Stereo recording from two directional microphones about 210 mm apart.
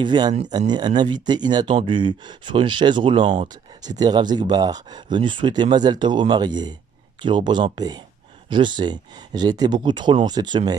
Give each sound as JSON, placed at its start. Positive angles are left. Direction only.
{"t": 0.0, "sound": "speech", "side_deg": -20}